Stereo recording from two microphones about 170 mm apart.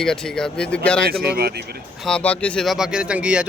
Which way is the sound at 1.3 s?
70° right (ahead or behind).